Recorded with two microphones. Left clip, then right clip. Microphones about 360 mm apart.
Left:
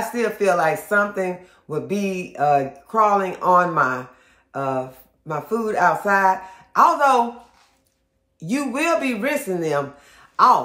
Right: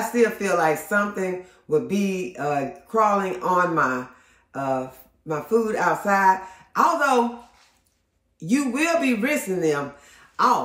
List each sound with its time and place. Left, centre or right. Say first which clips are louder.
0.1 s speech: left 1 dB; centre
4.5 s a sound: left 1 dB; centre
5.3 s speech: right 1 dB; centre
8.4 s a man's voice: even; centre